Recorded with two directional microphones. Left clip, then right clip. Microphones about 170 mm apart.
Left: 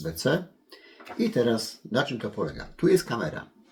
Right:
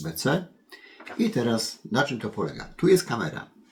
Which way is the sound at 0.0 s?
20° right (ahead or behind).